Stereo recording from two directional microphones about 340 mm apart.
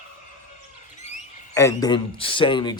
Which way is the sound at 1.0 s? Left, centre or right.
Centre.